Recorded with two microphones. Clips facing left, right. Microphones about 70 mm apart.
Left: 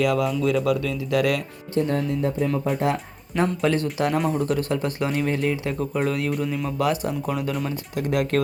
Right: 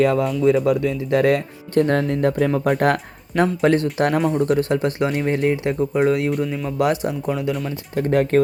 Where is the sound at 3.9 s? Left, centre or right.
Right.